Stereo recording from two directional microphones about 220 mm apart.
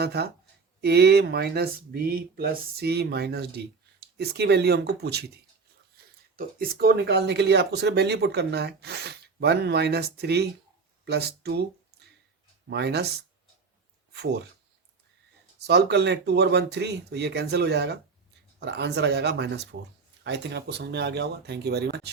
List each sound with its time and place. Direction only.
0.0 s speech: 45° right (ahead or behind)
6.3 s speech: 40° right (ahead or behind)
12.7 s speech: 50° right (ahead or behind)
14.1 s speech: 50° right (ahead or behind)
15.5 s speech: 50° right (ahead or behind)